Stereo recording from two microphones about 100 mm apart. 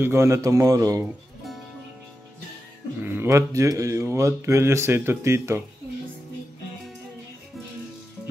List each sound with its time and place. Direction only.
0.0 s a man's voice: 25° right (ahead or behind)
3.0 s speech: 25° right (ahead or behind)